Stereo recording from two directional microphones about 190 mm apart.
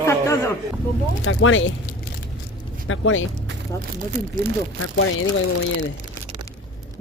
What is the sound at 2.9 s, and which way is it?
Speech, 90° left.